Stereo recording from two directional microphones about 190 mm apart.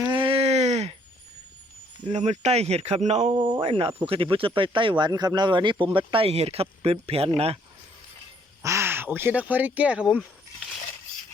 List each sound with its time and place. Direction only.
0.0 s a sound: 25° right (ahead or behind)
2.0 s speech: 35° right (ahead or behind)
8.6 s speech: 15° right (ahead or behind)